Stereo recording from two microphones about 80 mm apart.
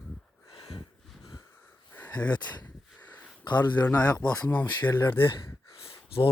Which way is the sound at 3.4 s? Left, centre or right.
Left.